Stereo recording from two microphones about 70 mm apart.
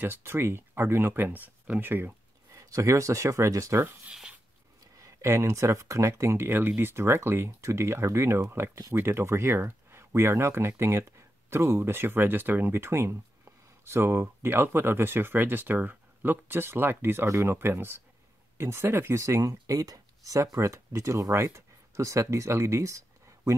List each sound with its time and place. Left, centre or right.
0.0 s speech: right
2.5 s speech: right
4.1 s writing: centre
5.2 s speech: right